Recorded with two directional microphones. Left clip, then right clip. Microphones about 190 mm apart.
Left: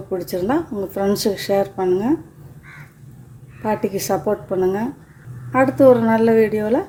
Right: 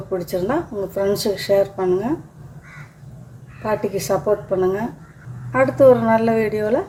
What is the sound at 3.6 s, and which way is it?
A woman's voice, 25° left (ahead or behind).